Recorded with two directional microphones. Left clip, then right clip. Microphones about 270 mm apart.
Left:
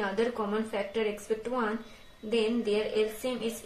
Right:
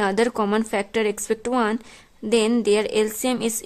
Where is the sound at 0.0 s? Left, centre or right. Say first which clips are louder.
Right 9 dB; right.